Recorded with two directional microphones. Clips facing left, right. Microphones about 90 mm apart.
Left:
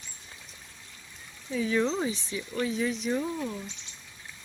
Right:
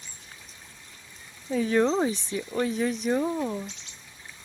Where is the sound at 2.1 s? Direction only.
55° right (ahead or behind).